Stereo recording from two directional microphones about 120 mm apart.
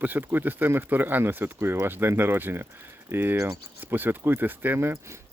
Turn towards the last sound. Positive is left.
turn(degrees=-20)  # may be behind; listen again after turning